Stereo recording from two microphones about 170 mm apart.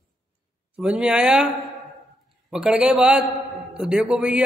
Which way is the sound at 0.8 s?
5° right (ahead or behind).